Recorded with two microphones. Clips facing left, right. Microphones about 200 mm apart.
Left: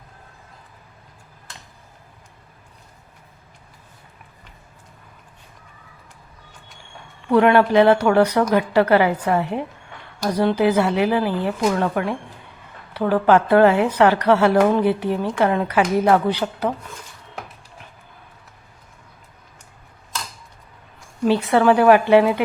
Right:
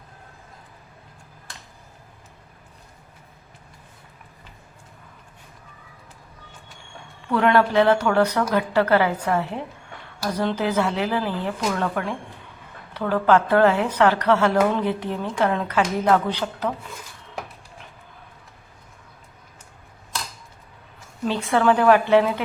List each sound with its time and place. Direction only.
7.3 s a woman's voice: 15° left (ahead or behind)
13.2 s a woman's voice: 15° left (ahead or behind)
21.2 s a woman's voice: 10° left (ahead or behind)